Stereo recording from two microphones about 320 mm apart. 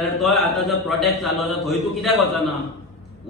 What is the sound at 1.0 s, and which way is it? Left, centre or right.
A man's voice, centre.